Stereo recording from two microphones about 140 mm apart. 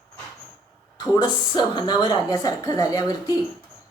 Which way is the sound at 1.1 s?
30° left (ahead or behind).